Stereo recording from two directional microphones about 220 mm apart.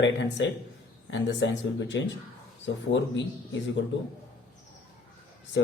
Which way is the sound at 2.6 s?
55° left (ahead or behind).